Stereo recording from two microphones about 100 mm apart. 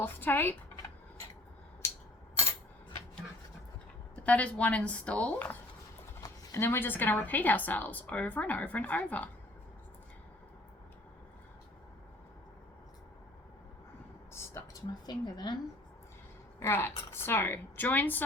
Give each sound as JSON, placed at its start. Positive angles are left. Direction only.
{"t": 0.0, "sound": "speech", "side_deg": 20}
{"t": 4.1, "sound": "a woman's voice", "side_deg": 15}
{"t": 14.3, "sound": "a sound", "side_deg": 25}
{"t": 15.0, "sound": "a woman's voice", "side_deg": 45}
{"t": 16.6, "sound": "speech", "side_deg": 25}